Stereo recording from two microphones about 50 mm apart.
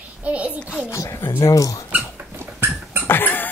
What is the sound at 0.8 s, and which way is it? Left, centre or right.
Speech, left.